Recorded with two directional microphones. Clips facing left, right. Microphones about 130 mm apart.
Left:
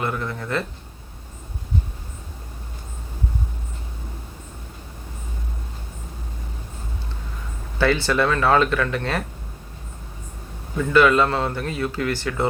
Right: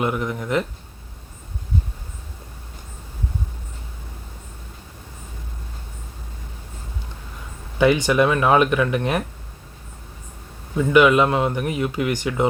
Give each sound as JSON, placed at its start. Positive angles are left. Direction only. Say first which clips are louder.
{"t": 0.0, "sound": "speech", "louder": "right 3 dB", "side_deg": -15}
{"t": 7.8, "sound": "speech", "louder": "right 3 dB", "side_deg": -15}
{"t": 10.8, "sound": "speech", "louder": "right 2 dB", "side_deg": -15}